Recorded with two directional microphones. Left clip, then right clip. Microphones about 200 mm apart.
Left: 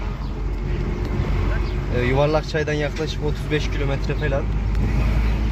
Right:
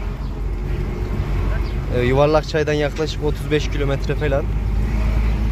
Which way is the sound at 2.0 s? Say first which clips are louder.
Right 4 dB; 25° right (ahead or behind).